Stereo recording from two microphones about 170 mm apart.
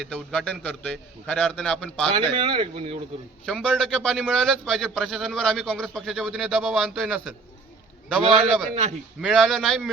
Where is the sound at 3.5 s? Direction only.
Centre (ahead or behind).